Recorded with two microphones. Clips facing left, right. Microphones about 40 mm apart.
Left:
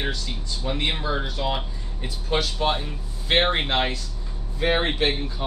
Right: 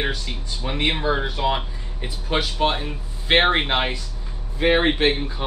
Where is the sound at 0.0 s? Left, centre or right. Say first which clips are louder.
Right 3 dB; right.